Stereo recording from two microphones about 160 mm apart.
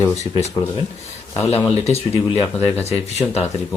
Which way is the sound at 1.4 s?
40° left (ahead or behind).